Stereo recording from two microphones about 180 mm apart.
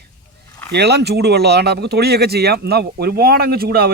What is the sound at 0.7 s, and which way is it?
Speech, 65° right (ahead or behind).